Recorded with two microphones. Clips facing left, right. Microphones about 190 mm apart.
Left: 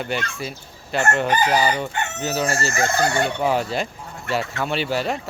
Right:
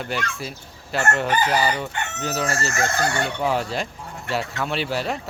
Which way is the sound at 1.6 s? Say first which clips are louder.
Left 2 dB; centre (ahead or behind).